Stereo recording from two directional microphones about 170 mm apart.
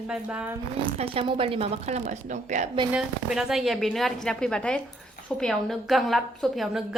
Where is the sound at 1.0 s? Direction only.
35° right (ahead or behind).